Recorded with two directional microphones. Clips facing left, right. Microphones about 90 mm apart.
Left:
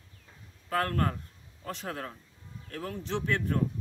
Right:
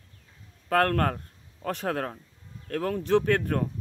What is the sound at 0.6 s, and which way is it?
A man's voice, 60° right (ahead or behind).